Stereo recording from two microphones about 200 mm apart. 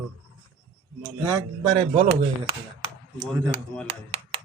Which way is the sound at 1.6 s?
25° right (ahead or behind).